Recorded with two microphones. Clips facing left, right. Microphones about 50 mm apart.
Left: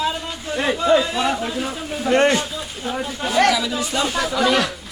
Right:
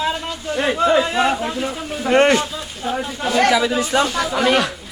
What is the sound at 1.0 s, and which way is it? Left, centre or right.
Speech, right.